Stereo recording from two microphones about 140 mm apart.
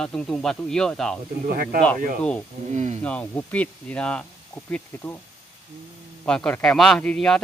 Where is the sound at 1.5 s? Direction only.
90° right.